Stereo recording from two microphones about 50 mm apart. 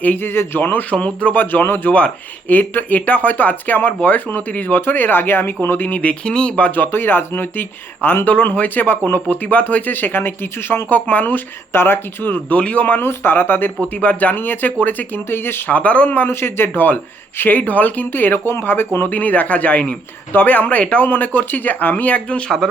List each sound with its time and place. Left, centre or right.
0.0 s speech: left
0.9 s speech: left
1.4 s speech: left
1.9 s speech: left
6.2 s speech: centre
6.6 s speech: left
11.7 s speech: left
12.3 s speech: left
13.0 s speech: left
15.7 s speech: left
16.3 s speech: left
16.6 s speech: left
19.0 s speech: left